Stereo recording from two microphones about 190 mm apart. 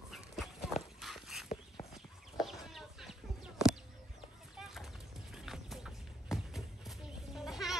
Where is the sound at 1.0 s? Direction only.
Centre (ahead or behind).